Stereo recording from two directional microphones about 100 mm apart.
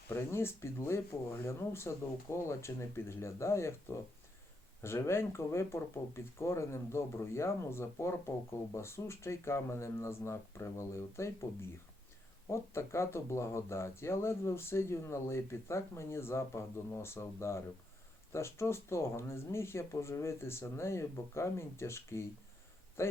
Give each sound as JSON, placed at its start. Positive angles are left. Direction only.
{"t": 0.1, "sound": "speech", "side_deg": 25}
{"t": 12.5, "sound": "speech", "side_deg": 25}